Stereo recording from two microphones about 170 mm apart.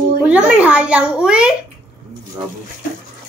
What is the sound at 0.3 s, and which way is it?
A child's voice, 10° right (ahead or behind).